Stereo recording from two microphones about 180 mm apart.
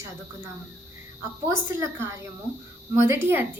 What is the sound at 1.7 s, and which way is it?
A woman's voice, 15° right (ahead or behind).